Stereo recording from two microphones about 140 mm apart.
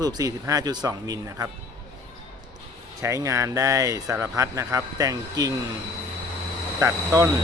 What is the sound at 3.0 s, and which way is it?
A man's voice, 20° right (ahead or behind).